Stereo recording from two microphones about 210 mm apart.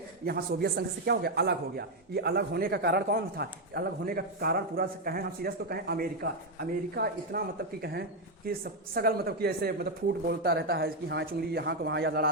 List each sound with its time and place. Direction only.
0.3 s speech: 50° right (ahead or behind)